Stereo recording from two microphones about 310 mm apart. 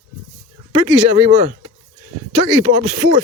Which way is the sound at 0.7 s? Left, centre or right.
Centre.